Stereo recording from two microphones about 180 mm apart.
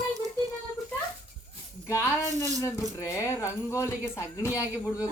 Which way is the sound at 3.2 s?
15° left (ahead or behind).